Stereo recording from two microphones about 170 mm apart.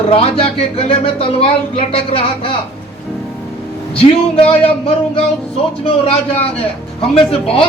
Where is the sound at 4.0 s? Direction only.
35° left (ahead or behind).